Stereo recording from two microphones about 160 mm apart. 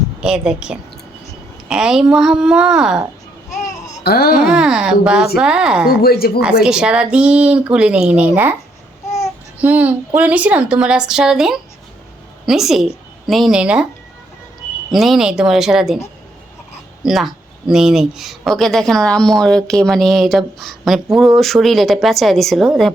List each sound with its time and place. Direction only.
0.2 s speech: 5° right (ahead or behind)
4.0 s speech: 75° left (ahead or behind)
4.4 s speech: 5° right (ahead or behind)
6.0 s speech: 70° left (ahead or behind)
6.4 s speech: 5° right (ahead or behind)
9.6 s a woman's voice: 10° right (ahead or behind)
14.8 s speech: centre (ahead or behind)
17.0 s speech: centre (ahead or behind)